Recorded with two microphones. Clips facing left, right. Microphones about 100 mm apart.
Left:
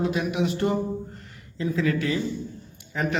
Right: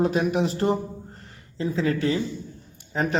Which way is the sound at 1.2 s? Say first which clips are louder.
Right 1 dB; 30° right (ahead or behind).